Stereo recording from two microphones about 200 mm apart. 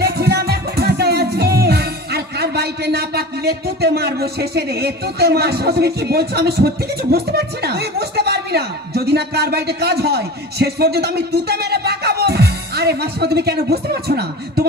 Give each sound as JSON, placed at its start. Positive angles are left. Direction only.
{"t": 0.0, "sound": "music", "side_deg": -55}